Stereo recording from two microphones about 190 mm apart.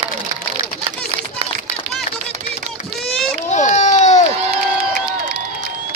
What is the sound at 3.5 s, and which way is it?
Run, 40° left (ahead or behind).